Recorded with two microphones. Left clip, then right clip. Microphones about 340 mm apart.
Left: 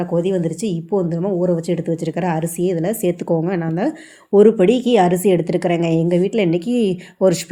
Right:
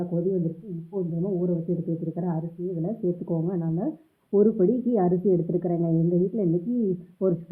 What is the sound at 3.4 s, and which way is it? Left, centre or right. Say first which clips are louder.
A woman's voice: left 9 dB; left.